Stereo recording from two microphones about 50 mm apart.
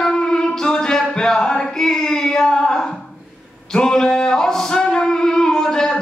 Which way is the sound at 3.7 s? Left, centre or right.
Centre.